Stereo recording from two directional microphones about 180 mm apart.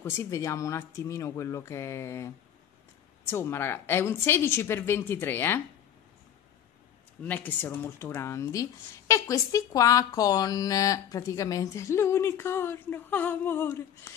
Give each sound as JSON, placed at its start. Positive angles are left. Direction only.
{"t": 0.0, "sound": "speech", "side_deg": 15}
{"t": 7.2, "sound": "speech", "side_deg": 10}